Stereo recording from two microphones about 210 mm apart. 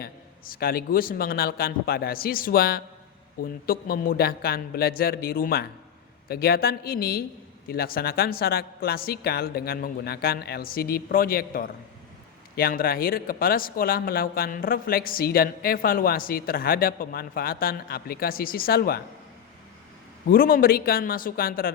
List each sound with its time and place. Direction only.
0.0 s speech: 45° left (ahead or behind)
20.2 s speech: 45° left (ahead or behind)